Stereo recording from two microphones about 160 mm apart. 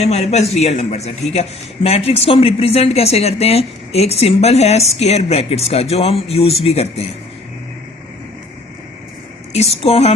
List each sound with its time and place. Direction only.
0.0 s a man's voice: 40° left (ahead or behind)
9.5 s a man's voice: 40° left (ahead or behind)